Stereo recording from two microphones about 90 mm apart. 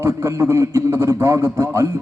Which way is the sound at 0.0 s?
35° right (ahead or behind).